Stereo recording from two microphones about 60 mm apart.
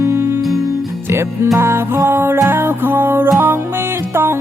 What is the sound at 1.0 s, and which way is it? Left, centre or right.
Music, right.